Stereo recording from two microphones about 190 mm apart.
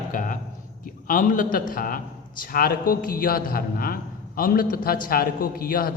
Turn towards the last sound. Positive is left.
turn(degrees=50)  # may be behind; listen again after turning